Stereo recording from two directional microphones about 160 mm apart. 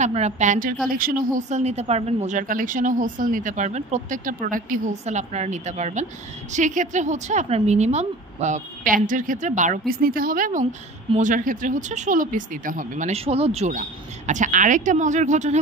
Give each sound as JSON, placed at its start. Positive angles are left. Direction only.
{"t": 0.0, "sound": "speech", "side_deg": -45}